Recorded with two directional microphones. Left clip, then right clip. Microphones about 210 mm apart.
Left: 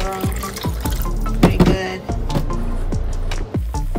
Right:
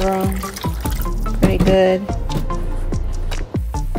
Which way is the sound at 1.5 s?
20° right (ahead or behind).